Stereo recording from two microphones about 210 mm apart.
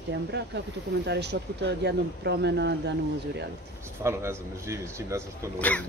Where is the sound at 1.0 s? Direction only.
55° right (ahead or behind).